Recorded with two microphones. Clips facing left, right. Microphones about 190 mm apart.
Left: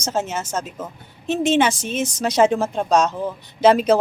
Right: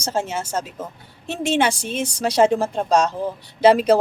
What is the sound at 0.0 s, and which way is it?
A woman's voice, 10° right (ahead or behind).